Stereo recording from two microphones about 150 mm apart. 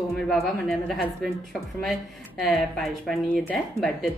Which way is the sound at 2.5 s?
Centre (ahead or behind).